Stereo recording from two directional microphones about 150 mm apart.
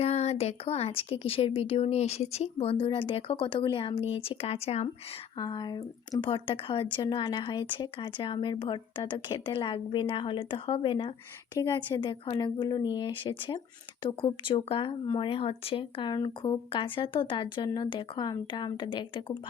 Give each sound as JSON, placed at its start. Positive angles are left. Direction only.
{"t": 0.0, "sound": "speech", "side_deg": 45}
{"t": 5.4, "sound": "a woman's voice", "side_deg": 30}